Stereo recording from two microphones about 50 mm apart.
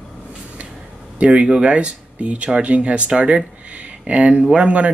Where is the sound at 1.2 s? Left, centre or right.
Right.